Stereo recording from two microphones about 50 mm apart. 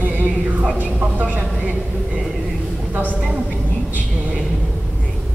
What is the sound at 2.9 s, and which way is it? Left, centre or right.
Speech, right.